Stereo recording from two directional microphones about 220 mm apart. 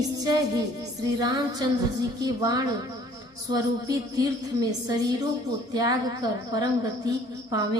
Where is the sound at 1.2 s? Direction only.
20° right (ahead or behind).